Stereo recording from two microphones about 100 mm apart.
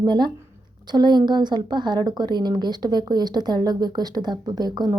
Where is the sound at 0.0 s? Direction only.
50° right (ahead or behind).